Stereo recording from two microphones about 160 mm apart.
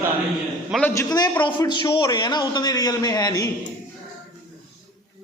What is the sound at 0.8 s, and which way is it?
Speech, 15° left (ahead or behind).